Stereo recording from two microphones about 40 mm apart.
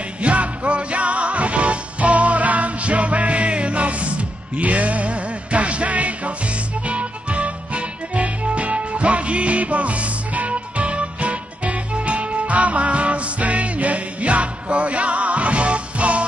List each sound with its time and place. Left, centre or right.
0.2 s music: right